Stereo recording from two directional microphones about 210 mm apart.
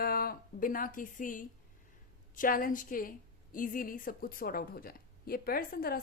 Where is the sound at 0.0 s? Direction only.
45° left (ahead or behind).